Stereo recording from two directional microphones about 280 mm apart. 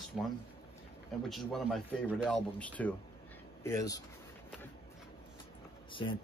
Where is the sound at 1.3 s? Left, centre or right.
Centre.